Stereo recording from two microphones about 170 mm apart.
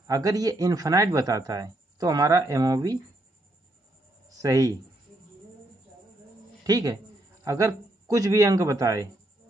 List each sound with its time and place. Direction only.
0.0 s speech: 20° right (ahead or behind)
4.4 s speech: 20° right (ahead or behind)
6.6 s a woman's voice: 25° right (ahead or behind)